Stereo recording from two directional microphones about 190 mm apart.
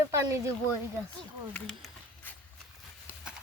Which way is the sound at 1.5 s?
5° left (ahead or behind).